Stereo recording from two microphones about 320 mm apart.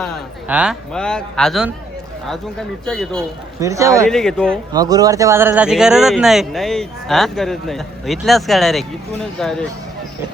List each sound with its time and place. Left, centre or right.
0.0 s speech: centre
2.8 s speech: centre
3.6 s speech: centre
4.1 s speech: centre
4.7 s speech: centre